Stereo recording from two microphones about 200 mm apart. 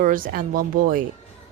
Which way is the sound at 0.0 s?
45° right (ahead or behind).